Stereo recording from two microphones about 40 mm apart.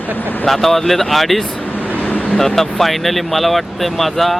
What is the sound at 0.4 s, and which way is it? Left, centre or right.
Speech, centre.